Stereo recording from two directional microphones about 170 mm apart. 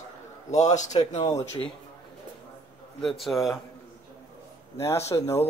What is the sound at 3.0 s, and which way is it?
Speech, centre (ahead or behind).